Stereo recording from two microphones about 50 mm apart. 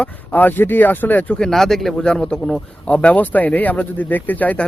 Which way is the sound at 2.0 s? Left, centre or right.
Centre.